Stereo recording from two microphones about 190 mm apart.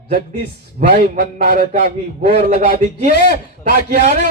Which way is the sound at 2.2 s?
35° right (ahead or behind).